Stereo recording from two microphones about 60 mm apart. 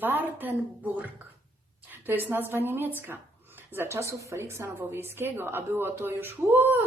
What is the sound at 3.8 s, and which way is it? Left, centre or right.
A woman's voice, right.